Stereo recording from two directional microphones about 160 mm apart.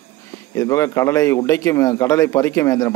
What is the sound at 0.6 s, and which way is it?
A man's voice, 20° left (ahead or behind).